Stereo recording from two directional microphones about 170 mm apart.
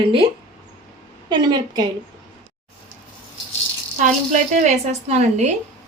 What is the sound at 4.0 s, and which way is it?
Speech, 45° right (ahead or behind).